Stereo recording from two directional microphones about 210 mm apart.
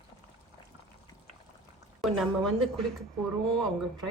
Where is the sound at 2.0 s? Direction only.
Centre (ahead or behind).